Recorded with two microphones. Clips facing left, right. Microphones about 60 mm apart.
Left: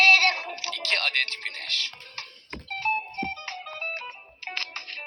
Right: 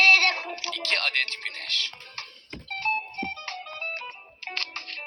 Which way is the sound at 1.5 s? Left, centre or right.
Left.